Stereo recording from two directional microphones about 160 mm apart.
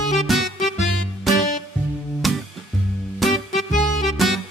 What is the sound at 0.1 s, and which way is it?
Music, centre (ahead or behind).